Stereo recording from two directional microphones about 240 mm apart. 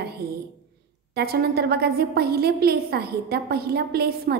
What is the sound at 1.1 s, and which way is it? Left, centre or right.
A woman's voice, right.